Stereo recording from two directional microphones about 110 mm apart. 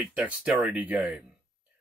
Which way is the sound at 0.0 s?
10° right (ahead or behind).